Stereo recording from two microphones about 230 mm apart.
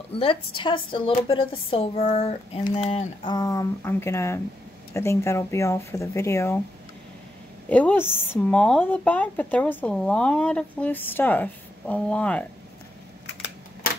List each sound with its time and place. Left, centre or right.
0.1 s speech: left
7.7 s speech: centre